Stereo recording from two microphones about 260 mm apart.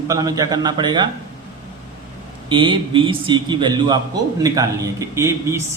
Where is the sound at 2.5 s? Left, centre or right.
Centre.